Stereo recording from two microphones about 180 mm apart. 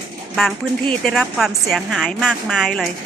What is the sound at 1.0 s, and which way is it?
A woman's voice, centre (ahead or behind).